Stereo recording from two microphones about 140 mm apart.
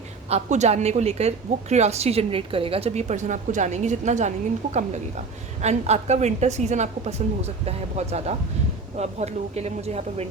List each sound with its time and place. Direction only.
0.3 s a woman's voice: 50° right (ahead or behind)